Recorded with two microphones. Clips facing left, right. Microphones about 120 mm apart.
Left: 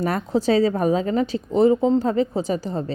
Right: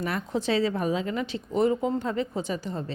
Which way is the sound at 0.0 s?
40° left (ahead or behind).